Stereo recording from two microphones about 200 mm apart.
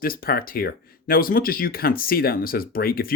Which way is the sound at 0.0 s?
45° left (ahead or behind).